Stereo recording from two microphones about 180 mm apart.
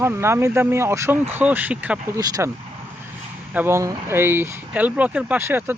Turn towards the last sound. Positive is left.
turn(degrees=-15)  # may be behind; listen again after turning